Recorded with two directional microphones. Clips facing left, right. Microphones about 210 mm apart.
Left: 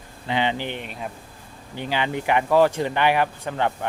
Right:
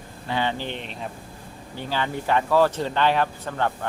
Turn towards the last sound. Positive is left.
turn(degrees=15)  # may be behind; listen again after turning